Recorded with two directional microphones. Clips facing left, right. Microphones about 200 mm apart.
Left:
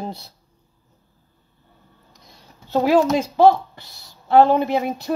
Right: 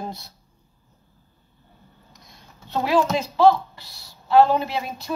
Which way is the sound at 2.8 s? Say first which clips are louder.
Left 4 dB; 45° left (ahead or behind).